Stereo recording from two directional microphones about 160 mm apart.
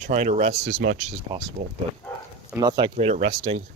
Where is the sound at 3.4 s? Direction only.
35° right (ahead or behind).